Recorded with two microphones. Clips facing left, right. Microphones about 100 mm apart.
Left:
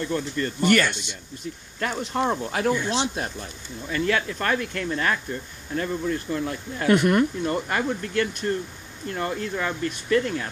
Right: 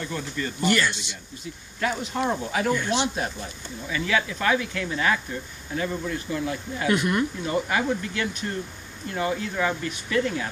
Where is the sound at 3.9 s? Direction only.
50° left (ahead or behind).